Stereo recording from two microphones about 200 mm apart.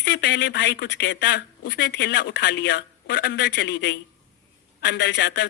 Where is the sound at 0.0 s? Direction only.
55° left (ahead or behind).